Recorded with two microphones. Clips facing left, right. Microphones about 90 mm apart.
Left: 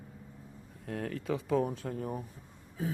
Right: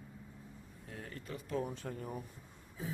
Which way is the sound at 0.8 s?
75° left (ahead or behind).